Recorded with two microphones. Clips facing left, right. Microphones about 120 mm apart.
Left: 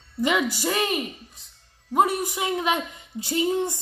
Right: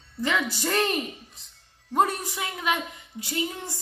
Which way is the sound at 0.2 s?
15° left (ahead or behind).